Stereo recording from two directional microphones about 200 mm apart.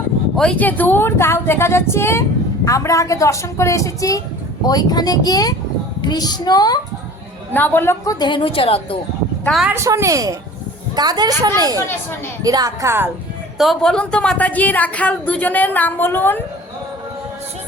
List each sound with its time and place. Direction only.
0.3 s a woman's voice: 5° left (ahead or behind)
7.5 s a woman's voice: 10° left (ahead or behind); by 9.0 s 25° left (ahead or behind)
9.4 s speech: centre (ahead or behind)
9.7 s a woman's voice: 15° right (ahead or behind)
13.6 s a woman's voice: centre (ahead or behind)